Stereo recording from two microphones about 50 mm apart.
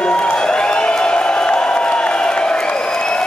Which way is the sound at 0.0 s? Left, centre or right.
Left.